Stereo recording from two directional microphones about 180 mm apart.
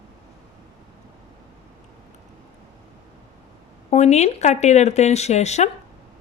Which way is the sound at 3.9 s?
40° left (ahead or behind).